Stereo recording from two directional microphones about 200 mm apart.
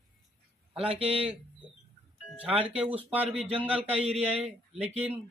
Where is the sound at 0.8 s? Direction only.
30° right (ahead or behind).